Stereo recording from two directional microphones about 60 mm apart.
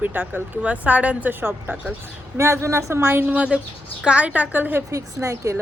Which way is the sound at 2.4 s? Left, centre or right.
Right.